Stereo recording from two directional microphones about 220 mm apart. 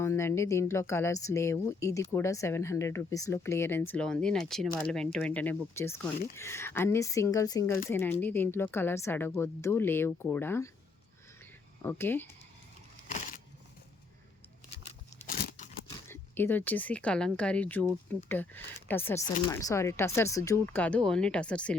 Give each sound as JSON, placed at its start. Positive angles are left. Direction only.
{"t": 0.0, "sound": "speech", "side_deg": 10}
{"t": 11.8, "sound": "speech", "side_deg": 10}
{"t": 13.1, "sound": "a sound", "side_deg": 35}
{"t": 15.3, "sound": "crumpling", "side_deg": 35}
{"t": 16.0, "sound": "speech", "side_deg": 10}